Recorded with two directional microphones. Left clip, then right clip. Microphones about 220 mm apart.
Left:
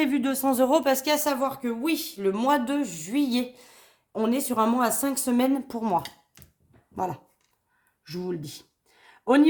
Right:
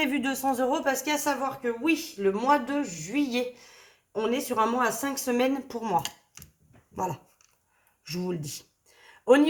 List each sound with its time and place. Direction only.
0.0 s speech: 30° left (ahead or behind)
0.4 s speech: 50° left (ahead or behind)
6.9 s speech: 35° left (ahead or behind)
8.2 s a sound: 30° left (ahead or behind)